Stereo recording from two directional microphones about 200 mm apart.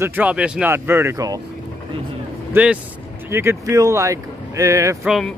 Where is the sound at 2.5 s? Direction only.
5° right (ahead or behind).